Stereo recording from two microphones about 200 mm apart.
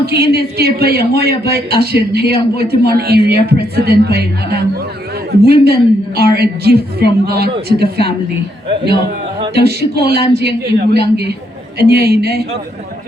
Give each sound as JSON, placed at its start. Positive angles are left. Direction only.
{"t": 0.0, "sound": "a man's voice", "side_deg": -50}
{"t": 9.6, "sound": "a man's voice", "side_deg": -50}